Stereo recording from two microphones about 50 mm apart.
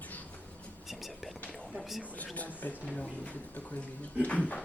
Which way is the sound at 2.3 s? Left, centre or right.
Left.